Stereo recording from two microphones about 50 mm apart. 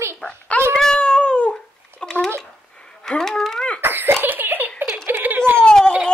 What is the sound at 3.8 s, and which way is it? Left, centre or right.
Speech, right.